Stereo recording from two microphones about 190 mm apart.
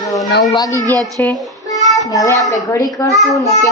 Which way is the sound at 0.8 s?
20° right (ahead or behind).